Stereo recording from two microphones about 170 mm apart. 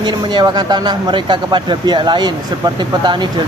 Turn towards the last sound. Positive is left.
turn(degrees=-25)  # may be behind; listen again after turning